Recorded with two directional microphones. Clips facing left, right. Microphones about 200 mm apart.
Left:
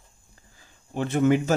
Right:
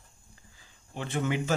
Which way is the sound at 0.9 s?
45° left (ahead or behind).